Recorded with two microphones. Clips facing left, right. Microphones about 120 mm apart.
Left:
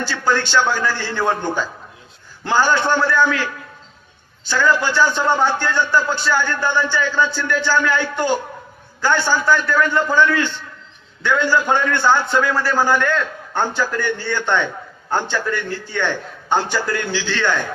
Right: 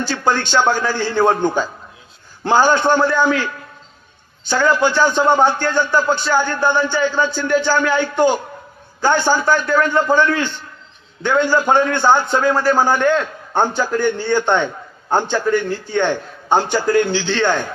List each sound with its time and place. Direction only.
0.0 s a sound: 20° right (ahead or behind)
0.4 s a man's voice: 15° right (ahead or behind)
4.6 s a man's voice: 20° right (ahead or behind)